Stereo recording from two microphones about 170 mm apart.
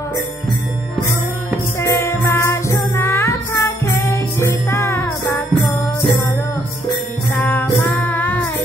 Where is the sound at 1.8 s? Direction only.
15° left (ahead or behind).